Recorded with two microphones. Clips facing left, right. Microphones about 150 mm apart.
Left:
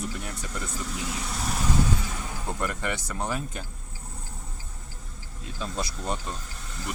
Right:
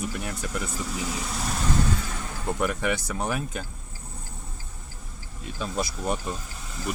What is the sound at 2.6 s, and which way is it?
Speech, 80° right.